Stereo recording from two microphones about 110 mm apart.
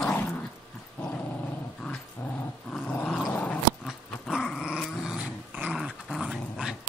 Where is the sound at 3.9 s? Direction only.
5° right (ahead or behind).